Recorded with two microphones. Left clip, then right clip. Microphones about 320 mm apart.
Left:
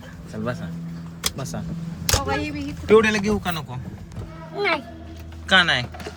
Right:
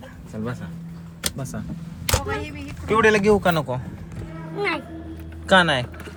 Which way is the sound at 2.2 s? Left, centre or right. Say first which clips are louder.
Left 3 dB; left.